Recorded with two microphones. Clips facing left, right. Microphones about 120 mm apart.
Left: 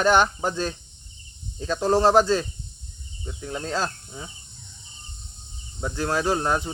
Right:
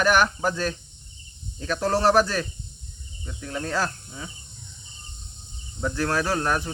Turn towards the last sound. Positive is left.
turn(degrees=20)  # may be behind; listen again after turning